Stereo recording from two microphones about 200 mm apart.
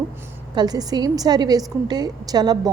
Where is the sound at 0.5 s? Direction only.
20° right (ahead or behind).